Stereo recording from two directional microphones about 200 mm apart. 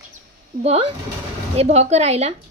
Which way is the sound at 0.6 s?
30° right (ahead or behind).